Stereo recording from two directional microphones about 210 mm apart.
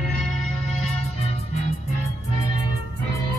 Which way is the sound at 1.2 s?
30° left (ahead or behind).